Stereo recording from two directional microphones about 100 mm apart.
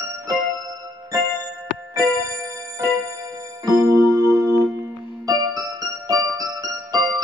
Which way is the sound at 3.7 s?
35° right (ahead or behind).